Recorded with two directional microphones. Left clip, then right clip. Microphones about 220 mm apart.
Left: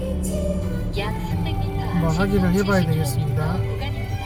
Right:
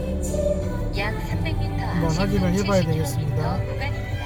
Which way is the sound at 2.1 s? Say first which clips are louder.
Left 6 dB; 30° left (ahead or behind).